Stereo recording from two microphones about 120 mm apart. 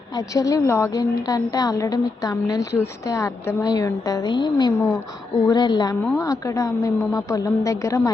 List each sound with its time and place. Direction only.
0.3 s a woman's voice: 30° left (ahead or behind)